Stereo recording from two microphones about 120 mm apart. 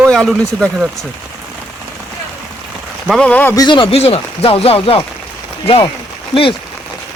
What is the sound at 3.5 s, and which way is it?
Speech, 35° left (ahead or behind).